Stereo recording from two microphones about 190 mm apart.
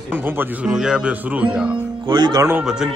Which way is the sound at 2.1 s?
20° right (ahead or behind).